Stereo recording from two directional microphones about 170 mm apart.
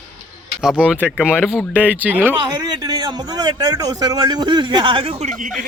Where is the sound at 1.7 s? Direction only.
10° right (ahead or behind).